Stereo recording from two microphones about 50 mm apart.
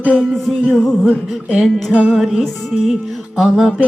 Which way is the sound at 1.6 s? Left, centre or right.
Centre.